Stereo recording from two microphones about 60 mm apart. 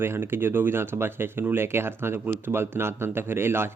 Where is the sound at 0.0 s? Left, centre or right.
Right.